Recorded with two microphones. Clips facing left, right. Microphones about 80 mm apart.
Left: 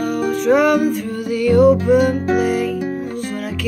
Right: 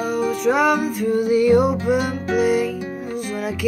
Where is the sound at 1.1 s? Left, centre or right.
Right.